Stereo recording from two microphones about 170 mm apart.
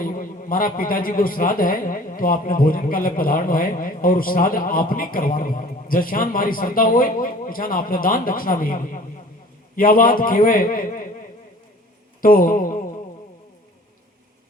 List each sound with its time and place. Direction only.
0.0 s a man's voice: 55° left (ahead or behind)
12.2 s speech: 55° left (ahead or behind)